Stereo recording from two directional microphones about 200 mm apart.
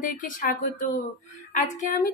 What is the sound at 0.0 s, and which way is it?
Speech, 45° left (ahead or behind).